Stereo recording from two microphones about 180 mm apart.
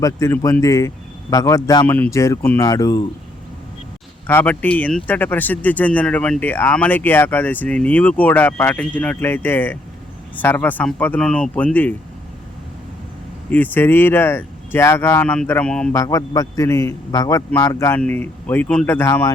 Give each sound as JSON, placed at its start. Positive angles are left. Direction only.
{"t": 0.0, "sound": "a man's voice", "side_deg": 20}
{"t": 4.3, "sound": "speech", "side_deg": 10}
{"t": 13.5, "sound": "speech", "side_deg": 10}
{"t": 15.9, "sound": "a man's voice", "side_deg": 20}